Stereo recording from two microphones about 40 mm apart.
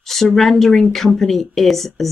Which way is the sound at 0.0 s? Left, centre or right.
Centre.